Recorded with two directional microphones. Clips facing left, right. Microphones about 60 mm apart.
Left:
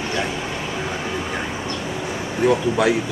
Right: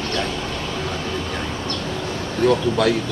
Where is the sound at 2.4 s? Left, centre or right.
Centre.